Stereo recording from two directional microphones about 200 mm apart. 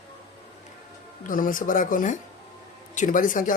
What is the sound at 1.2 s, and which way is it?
Speech, 45° left (ahead or behind).